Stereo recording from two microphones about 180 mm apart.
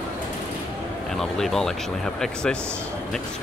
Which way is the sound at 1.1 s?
Centre (ahead or behind).